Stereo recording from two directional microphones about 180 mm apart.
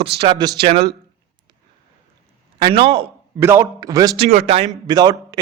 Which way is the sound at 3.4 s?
15° right (ahead or behind).